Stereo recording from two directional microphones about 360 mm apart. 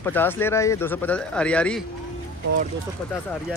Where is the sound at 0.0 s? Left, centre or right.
Centre.